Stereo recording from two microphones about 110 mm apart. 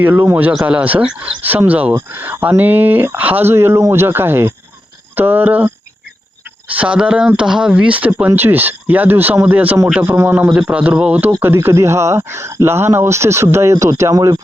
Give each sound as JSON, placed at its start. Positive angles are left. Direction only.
{"t": 0.0, "sound": "speech", "side_deg": -20}
{"t": 10.5, "sound": "speech", "side_deg": -10}